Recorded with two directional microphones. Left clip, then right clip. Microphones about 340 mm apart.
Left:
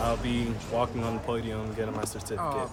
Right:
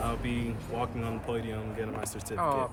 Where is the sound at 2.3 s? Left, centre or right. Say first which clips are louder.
Right 3 dB; right.